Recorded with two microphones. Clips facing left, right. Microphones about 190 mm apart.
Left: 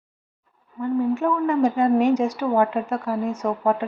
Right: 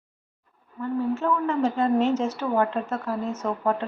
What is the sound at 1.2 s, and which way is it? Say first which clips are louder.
A woman's voice: left 4 dB; 15° left (ahead or behind).